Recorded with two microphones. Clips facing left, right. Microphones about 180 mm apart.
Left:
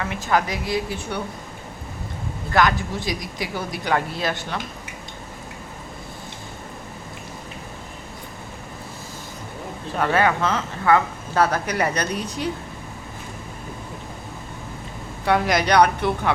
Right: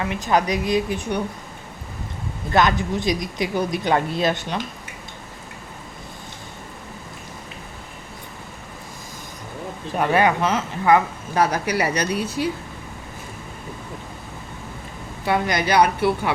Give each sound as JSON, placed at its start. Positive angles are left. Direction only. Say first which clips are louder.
{"t": 0.0, "sound": "speech", "louder": "right 2 dB", "side_deg": -20}
{"t": 2.5, "sound": "speech", "louder": "right 1 dB", "side_deg": -20}
{"t": 10.0, "sound": "speech", "louder": "right 1 dB", "side_deg": -15}
{"t": 15.3, "sound": "speech", "louder": "left 1 dB", "side_deg": 0}